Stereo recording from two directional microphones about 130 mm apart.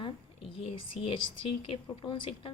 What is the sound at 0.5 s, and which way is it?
A woman's voice, 45° left (ahead or behind).